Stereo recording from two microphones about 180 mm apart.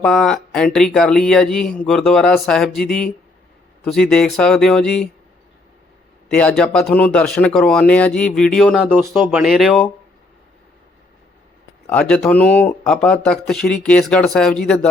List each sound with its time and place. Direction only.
0.0 s speech: centre (ahead or behind)
3.8 s speech: centre (ahead or behind)
6.2 s a man's voice: 5° left (ahead or behind)
11.9 s speech: 5° left (ahead or behind)